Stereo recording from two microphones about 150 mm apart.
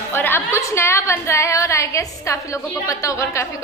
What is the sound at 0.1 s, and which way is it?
A woman's voice, 15° left (ahead or behind).